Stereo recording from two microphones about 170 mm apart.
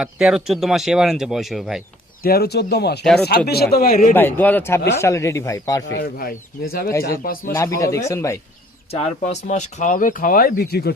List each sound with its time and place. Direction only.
0.0 s speech: 5° right (ahead or behind)
2.2 s speech: 65° left (ahead or behind)
3.0 s speech: 5° left (ahead or behind)
3.2 s speech: 70° left (ahead or behind)
4.1 s speech: 10° left (ahead or behind)
5.9 s speech: 65° left (ahead or behind)
7.5 s speech: 20° left (ahead or behind)
8.9 s speech: 40° left (ahead or behind); by 10.9 s 70° left (ahead or behind)